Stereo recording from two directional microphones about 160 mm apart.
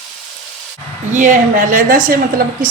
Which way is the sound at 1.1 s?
50° right (ahead or behind).